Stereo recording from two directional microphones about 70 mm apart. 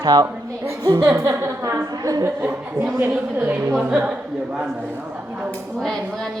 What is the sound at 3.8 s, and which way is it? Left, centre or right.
Speech, centre.